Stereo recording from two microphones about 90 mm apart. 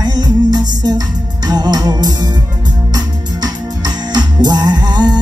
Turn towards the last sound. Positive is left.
turn(degrees=-55)  # may be behind; listen again after turning